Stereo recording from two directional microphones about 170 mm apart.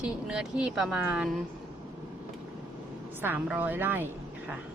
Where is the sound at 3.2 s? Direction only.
10° right (ahead or behind).